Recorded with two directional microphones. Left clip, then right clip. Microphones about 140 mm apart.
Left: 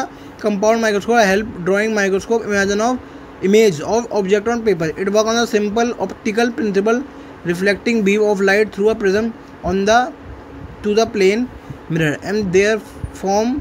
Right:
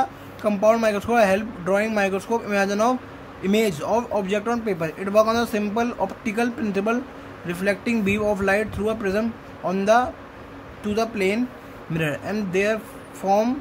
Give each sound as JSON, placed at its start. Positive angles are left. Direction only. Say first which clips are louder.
{"t": 0.0, "sound": "speech", "louder": "left 2 dB", "side_deg": 25}